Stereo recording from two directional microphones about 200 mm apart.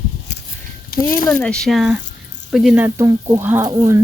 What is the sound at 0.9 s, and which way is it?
Speech, 50° left (ahead or behind).